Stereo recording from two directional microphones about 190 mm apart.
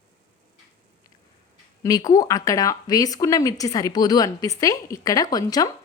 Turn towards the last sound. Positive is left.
turn(degrees=20)  # may be behind; listen again after turning